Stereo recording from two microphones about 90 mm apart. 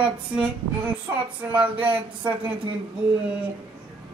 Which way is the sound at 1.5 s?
15° right (ahead or behind).